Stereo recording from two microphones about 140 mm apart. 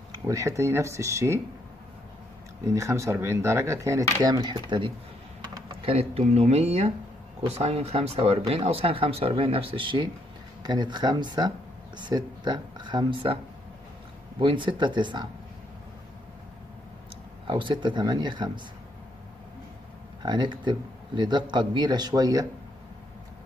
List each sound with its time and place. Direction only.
0.1 s speech: 25° right (ahead or behind)
2.6 s speech: 25° right (ahead or behind)
5.8 s speech: 45° right (ahead or behind)
14.4 s speech: 35° right (ahead or behind)
17.5 s speech: 35° right (ahead or behind)
20.2 s speech: 35° right (ahead or behind)